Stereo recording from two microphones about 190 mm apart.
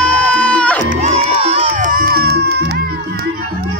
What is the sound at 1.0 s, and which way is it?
Music, 35° right (ahead or behind).